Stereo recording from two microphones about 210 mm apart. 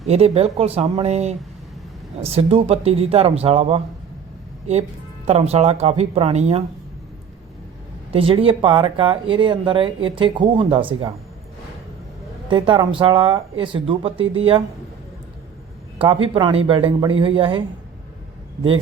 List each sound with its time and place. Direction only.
0.1 s speech: 30° right (ahead or behind)
5.5 s speech: 30° right (ahead or behind)
8.1 s speech: 25° right (ahead or behind)
12.5 s speech: 25° right (ahead or behind)
16.0 s speech: 25° right (ahead or behind)